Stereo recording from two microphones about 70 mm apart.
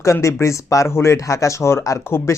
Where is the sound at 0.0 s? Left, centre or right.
Left.